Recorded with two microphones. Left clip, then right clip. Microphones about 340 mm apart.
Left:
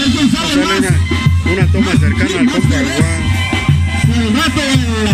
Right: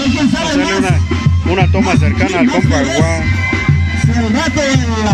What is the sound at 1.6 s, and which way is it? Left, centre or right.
Speech, centre.